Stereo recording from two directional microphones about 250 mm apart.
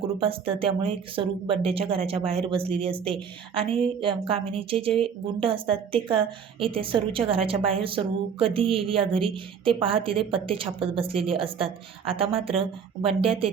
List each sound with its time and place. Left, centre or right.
0.2 s a woman's voice: right